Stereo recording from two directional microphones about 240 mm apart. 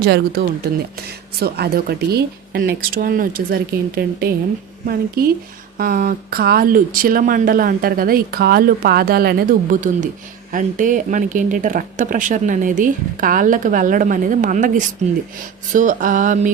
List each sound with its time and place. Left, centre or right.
0.0 s speech: right